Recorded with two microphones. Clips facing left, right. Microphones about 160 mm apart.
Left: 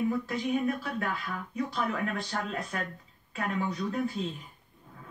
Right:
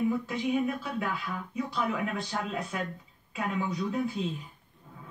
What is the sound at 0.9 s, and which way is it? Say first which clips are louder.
Speech: right 1 dB; 5° right (ahead or behind).